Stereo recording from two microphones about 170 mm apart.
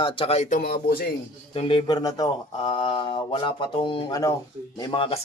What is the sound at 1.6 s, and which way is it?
Speech, 35° left (ahead or behind).